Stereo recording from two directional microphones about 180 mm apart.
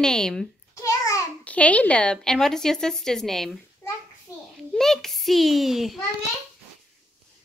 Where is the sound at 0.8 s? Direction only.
20° left (ahead or behind).